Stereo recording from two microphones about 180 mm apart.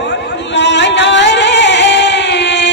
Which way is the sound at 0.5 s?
75° left (ahead or behind).